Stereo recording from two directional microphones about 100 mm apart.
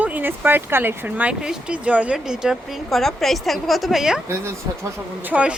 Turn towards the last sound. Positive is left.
turn(degrees=-15)  # may be behind; listen again after turning